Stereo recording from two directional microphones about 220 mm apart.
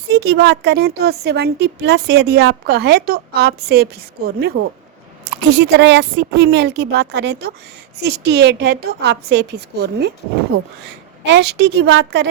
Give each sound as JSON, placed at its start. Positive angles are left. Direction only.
{"t": 0.1, "sound": "a woman's voice", "side_deg": -50}
{"t": 11.3, "sound": "a woman's voice", "side_deg": -50}